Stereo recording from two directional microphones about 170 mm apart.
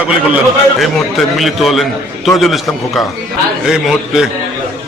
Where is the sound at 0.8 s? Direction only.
Centre (ahead or behind).